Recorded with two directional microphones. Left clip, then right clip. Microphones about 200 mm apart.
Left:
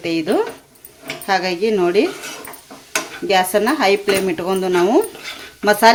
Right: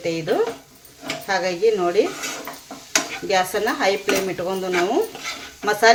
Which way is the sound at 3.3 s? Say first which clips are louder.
Left 5 dB; 45° left (ahead or behind).